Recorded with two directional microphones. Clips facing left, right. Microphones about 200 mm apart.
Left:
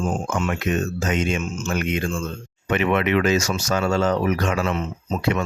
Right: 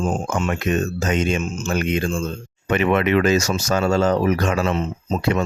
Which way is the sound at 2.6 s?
40° right (ahead or behind).